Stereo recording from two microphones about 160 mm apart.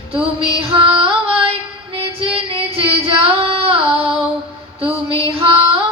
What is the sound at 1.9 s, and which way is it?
Child singing, 35° right (ahead or behind).